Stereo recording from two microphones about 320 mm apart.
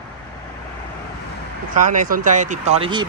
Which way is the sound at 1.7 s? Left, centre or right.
Right.